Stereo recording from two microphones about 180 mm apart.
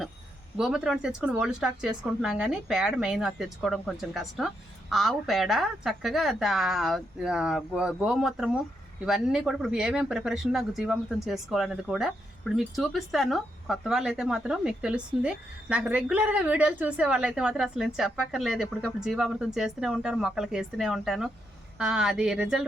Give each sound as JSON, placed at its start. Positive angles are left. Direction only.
{"t": 0.5, "sound": "speech", "side_deg": -5}